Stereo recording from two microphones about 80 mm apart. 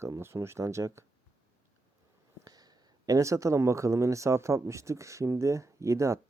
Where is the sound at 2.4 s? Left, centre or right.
Right.